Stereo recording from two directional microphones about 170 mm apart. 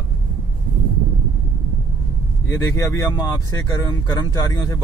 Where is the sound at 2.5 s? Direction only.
20° left (ahead or behind).